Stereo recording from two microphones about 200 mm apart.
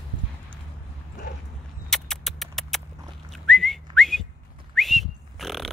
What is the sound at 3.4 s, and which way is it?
Whistling, centre (ahead or behind).